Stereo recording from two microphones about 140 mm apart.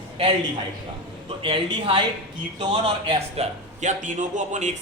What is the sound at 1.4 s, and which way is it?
A man's voice, 40° right (ahead or behind).